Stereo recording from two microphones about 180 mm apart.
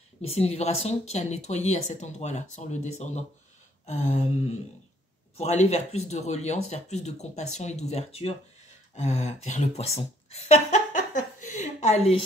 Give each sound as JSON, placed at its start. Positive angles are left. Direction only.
{"t": 0.3, "sound": "speech", "side_deg": 35}
{"t": 5.4, "sound": "speech", "side_deg": 35}
{"t": 8.9, "sound": "a sound", "side_deg": 40}